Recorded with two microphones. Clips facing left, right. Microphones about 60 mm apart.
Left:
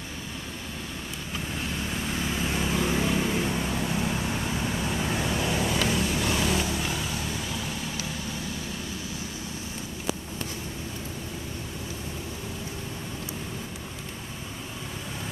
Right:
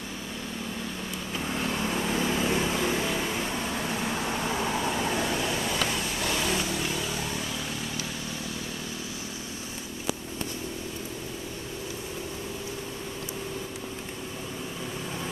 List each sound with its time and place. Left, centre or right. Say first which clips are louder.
2.1 s vehicle: right 2 dB; centre
4.3 s vehicle: right 1 dB; centre
5.1 s vehicle: even; centre
5.9 s vehicle: left 3 dB; centre